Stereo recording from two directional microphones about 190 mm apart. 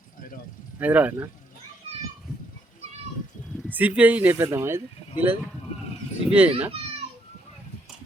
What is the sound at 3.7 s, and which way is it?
Speech, 10° right (ahead or behind).